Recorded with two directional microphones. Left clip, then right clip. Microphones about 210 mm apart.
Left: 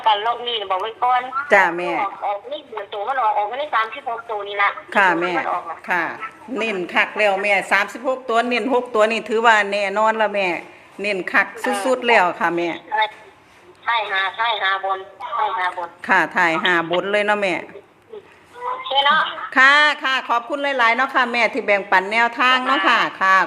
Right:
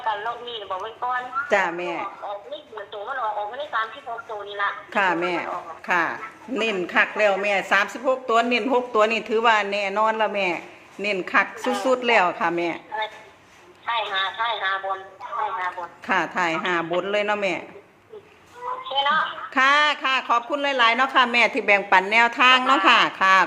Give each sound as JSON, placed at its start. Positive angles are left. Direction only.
{"t": 0.0, "sound": "a woman's voice", "side_deg": 45}
{"t": 1.5, "sound": "a woman's voice", "side_deg": 20}
{"t": 2.2, "sound": "a woman's voice", "side_deg": 40}
{"t": 4.9, "sound": "a woman's voice", "side_deg": 15}
{"t": 5.9, "sound": "a woman's voice", "side_deg": 0}
{"t": 11.6, "sound": "a man's voice", "side_deg": 25}
{"t": 11.9, "sound": "a woman's voice", "side_deg": 10}
{"t": 13.8, "sound": "a man's voice", "side_deg": 25}
{"t": 16.0, "sound": "a woman's voice", "side_deg": 15}
{"t": 18.6, "sound": "a sound", "side_deg": 30}
{"t": 19.5, "sound": "a woman's voice", "side_deg": 15}